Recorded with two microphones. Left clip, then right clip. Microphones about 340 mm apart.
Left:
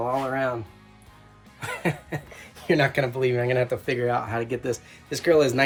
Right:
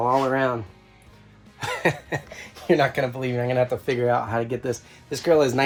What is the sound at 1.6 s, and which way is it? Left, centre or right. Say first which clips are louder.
Cough: right 5 dB; right.